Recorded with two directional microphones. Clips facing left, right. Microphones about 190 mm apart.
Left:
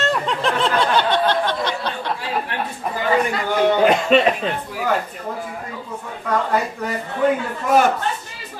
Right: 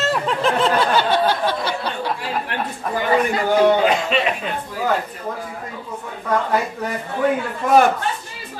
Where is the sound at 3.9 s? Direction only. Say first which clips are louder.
Left 4 dB; 45° left (ahead or behind).